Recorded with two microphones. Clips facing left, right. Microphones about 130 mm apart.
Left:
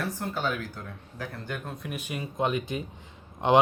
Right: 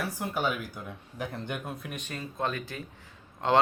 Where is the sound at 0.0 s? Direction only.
10° right (ahead or behind).